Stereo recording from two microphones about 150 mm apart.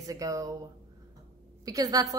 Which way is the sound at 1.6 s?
25° right (ahead or behind).